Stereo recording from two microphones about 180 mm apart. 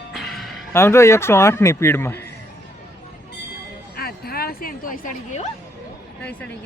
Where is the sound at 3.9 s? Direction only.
55° left (ahead or behind).